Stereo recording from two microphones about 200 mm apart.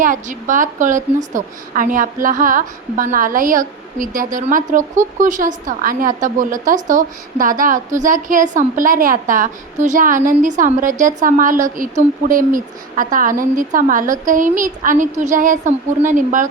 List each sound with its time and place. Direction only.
0.0 s a woman's voice: 40° right (ahead or behind)